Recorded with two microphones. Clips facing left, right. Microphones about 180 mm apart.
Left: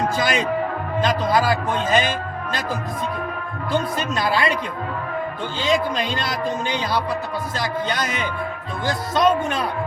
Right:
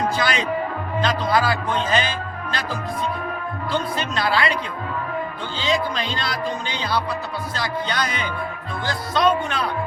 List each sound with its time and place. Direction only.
0.2 s a man's voice: 45° left (ahead or behind)
3.7 s a man's voice: 45° left (ahead or behind)
4.2 s a man's voice: 15° left (ahead or behind)
5.5 s a man's voice: 45° left (ahead or behind)